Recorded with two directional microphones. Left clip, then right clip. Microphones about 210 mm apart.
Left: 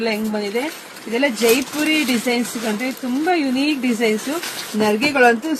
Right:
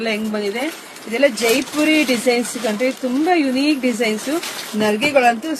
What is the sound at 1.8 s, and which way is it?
Speech, 20° right (ahead or behind).